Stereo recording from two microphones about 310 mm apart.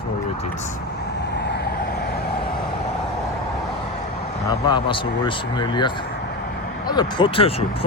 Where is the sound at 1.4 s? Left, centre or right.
Left.